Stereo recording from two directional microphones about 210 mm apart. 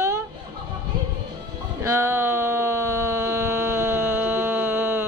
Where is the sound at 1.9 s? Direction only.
10° right (ahead or behind).